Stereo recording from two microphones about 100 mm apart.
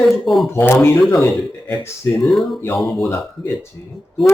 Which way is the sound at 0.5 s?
25° left (ahead or behind).